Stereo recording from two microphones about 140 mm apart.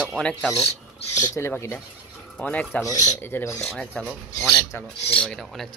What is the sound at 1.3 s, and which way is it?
Speech, 20° left (ahead or behind).